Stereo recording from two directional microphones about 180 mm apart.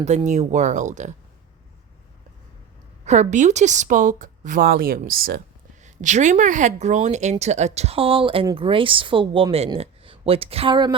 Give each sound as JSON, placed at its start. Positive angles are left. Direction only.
{"t": 0.3, "sound": "speech", "side_deg": -40}
{"t": 3.0, "sound": "a woman's voice", "side_deg": -40}
{"t": 5.8, "sound": "speech", "side_deg": -40}